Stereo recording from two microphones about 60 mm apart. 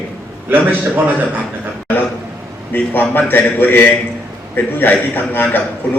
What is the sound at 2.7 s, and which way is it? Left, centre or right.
A man's voice, left.